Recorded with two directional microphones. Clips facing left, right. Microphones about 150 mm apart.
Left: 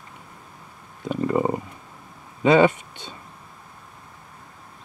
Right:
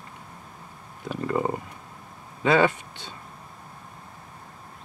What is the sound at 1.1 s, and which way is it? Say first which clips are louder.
Stomach rumble: left 4 dB; 20° left (ahead or behind).